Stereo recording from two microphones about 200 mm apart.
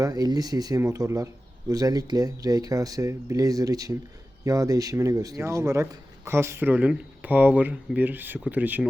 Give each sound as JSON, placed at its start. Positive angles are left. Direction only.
{"t": 0.0, "sound": "speech", "side_deg": -20}